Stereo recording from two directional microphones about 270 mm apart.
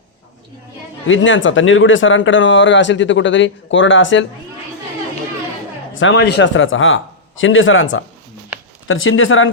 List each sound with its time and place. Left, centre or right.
1.0 s speech: left
6.0 s speech: left
8.5 s a sound: centre
8.9 s speech: left